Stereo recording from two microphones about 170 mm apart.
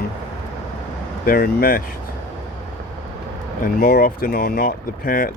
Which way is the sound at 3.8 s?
60° left (ahead or behind).